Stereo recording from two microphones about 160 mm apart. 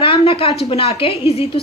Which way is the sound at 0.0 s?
35° left (ahead or behind).